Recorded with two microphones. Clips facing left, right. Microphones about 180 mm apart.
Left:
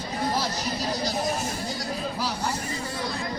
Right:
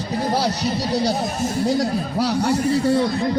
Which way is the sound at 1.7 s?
70° right (ahead or behind).